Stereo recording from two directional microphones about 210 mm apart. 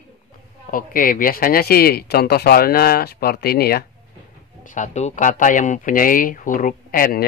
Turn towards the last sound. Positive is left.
turn(degrees=40)  # may be behind; listen again after turning